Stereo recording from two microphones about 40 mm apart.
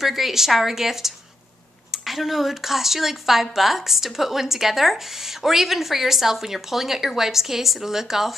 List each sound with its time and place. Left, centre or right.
0.0 s speech: centre